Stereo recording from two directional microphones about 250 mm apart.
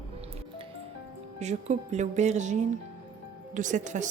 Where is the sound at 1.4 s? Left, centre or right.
Right.